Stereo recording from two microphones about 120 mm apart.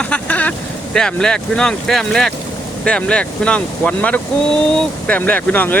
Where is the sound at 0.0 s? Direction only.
10° left (ahead or behind).